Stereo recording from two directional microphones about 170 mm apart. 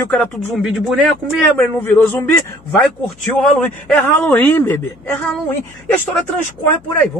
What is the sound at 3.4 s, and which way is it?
Speech, 5° left (ahead or behind).